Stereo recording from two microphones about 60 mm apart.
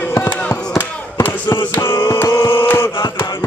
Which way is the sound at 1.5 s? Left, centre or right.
Left.